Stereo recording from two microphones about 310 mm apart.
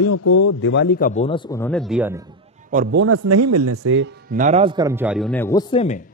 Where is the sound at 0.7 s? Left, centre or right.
Left; by 2.3 s centre.